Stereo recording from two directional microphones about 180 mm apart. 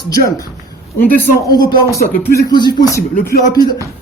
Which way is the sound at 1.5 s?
25° left (ahead or behind).